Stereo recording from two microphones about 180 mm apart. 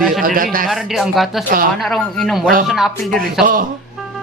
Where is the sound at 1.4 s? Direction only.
50° right (ahead or behind).